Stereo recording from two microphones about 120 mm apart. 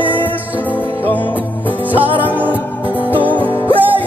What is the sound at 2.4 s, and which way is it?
Music, 15° right (ahead or behind).